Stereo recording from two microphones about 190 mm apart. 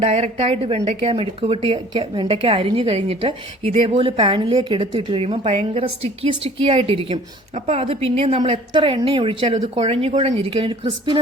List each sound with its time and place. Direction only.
0.0 s speech: 35° right (ahead or behind)